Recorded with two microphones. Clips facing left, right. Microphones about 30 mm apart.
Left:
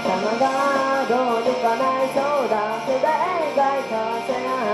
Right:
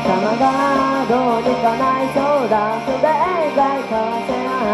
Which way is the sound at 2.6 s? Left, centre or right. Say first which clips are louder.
Right 4 dB; right.